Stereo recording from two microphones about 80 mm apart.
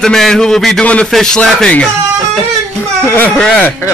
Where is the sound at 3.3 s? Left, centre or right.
Centre.